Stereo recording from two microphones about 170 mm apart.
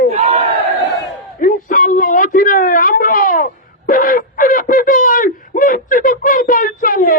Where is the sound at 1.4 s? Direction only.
55° left (ahead or behind).